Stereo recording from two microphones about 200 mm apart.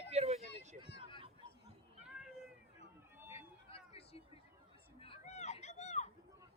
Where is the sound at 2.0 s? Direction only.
5° right (ahead or behind).